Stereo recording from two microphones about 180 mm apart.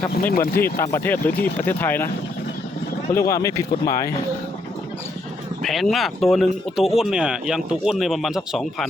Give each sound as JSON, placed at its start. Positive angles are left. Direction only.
{"t": 0.1, "sound": "speech", "side_deg": 55}
{"t": 0.8, "sound": "speech", "side_deg": 15}
{"t": 3.1, "sound": "speech", "side_deg": 15}
{"t": 5.6, "sound": "speech", "side_deg": 0}